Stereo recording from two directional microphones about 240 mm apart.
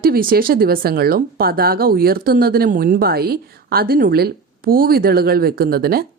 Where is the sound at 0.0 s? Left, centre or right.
Right.